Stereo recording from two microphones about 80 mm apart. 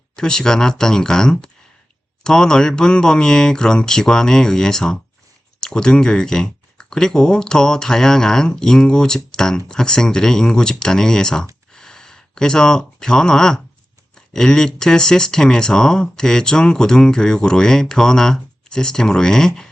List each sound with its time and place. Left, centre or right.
0.2 s speech: centre
11.7 s a sound: centre
14.3 s speech: centre